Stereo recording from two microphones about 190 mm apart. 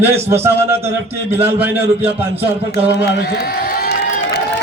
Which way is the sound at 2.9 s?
60° left (ahead or behind).